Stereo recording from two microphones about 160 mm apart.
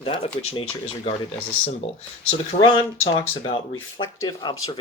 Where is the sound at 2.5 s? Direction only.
50° left (ahead or behind).